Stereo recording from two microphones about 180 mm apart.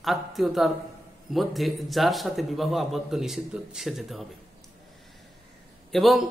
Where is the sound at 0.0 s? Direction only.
Centre (ahead or behind).